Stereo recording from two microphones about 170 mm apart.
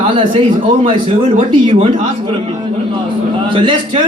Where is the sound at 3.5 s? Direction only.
30° right (ahead or behind).